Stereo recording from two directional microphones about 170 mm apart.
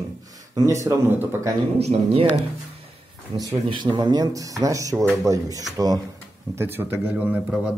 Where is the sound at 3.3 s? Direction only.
25° right (ahead or behind).